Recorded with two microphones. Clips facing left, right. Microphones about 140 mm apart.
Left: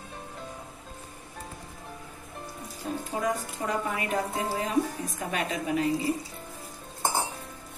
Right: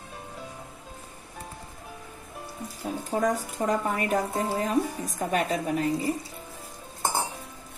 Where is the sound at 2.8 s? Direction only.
5° right (ahead or behind).